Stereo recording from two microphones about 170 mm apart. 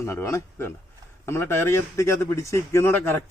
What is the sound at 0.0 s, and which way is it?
Speech, 15° left (ahead or behind).